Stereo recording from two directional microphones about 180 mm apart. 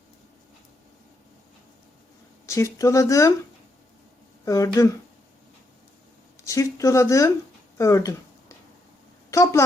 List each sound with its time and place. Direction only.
2.5 s speech: 15° left (ahead or behind)
4.4 s speech: 20° left (ahead or behind)
6.4 s speech: 20° left (ahead or behind)
7.8 s a sound: 20° left (ahead or behind)
9.3 s speech: 15° left (ahead or behind)